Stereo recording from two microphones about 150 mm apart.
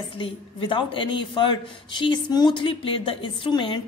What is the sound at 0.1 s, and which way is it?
A woman's voice, 35° left (ahead or behind).